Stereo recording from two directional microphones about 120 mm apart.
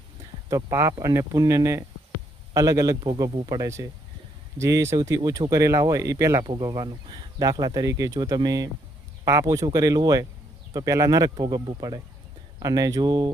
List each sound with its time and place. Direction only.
0.5 s speech: 25° right (ahead or behind)
3.0 s speech: 40° right (ahead or behind)
6.4 s speech: 35° right (ahead or behind)